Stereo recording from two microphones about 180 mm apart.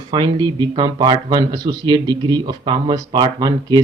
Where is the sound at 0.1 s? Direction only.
25° right (ahead or behind).